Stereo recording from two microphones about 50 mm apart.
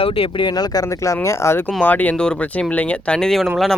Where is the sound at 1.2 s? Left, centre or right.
Left.